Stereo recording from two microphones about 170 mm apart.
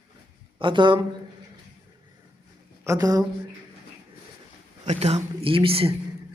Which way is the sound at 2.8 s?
20° right (ahead or behind).